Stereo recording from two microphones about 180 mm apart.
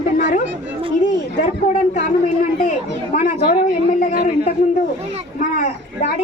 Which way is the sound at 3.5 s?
45° left (ahead or behind).